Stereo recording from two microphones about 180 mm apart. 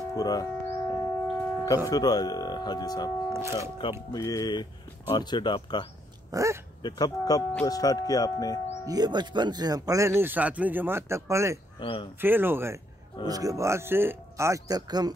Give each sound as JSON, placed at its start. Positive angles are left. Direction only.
{"t": 0.1, "sound": "a sound", "side_deg": 20}
{"t": 1.9, "sound": "speech", "side_deg": 20}
{"t": 6.3, "sound": "speech", "side_deg": -15}
{"t": 6.8, "sound": "speech", "side_deg": 20}
{"t": 8.8, "sound": "speech", "side_deg": -20}
{"t": 11.8, "sound": "speech", "side_deg": 30}
{"t": 12.2, "sound": "speech", "side_deg": -10}